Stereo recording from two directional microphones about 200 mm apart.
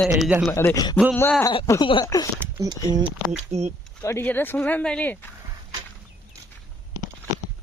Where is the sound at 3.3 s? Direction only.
35° right (ahead or behind).